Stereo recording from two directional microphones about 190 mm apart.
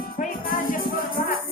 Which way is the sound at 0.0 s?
50° left (ahead or behind).